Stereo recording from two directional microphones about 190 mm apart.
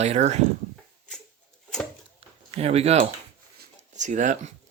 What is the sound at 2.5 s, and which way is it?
Speech, 35° right (ahead or behind).